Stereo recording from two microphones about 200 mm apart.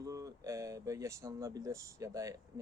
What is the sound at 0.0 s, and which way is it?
Speech, 15° right (ahead or behind).